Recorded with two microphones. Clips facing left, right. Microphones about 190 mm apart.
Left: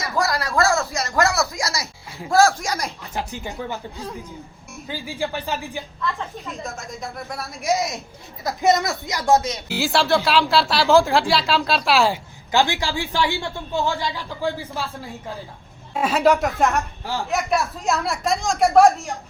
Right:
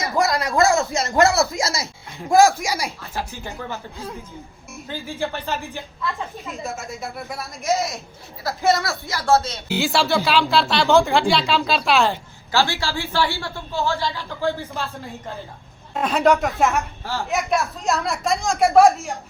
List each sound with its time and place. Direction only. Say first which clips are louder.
0.0 s speech: right 2 dB; 20° right (ahead or behind)
3.0 s a woman's voice: left 1 dB; 15° left (ahead or behind)
5.3 s a woman's voice: left 1 dB; 15° left (ahead or behind)
6.0 s speech: even; centre (ahead or behind)
7.6 s a woman's voice: even; 15° left (ahead or behind)
9.6 s speech: even; centre (ahead or behind)
12.5 s a woman's voice: left 1 dB; 15° left (ahead or behind)
16.0 s speech: even; 5° left (ahead or behind)